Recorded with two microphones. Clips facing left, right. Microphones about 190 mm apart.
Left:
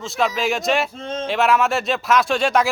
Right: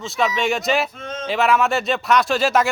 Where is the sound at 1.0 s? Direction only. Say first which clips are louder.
Left 3 dB; 30° left (ahead or behind).